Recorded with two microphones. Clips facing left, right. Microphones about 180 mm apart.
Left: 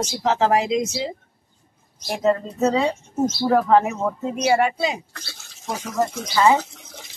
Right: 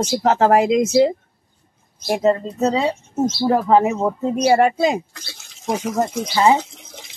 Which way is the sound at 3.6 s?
5° right (ahead or behind).